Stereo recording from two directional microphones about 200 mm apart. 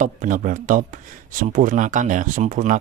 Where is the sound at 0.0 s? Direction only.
40° right (ahead or behind).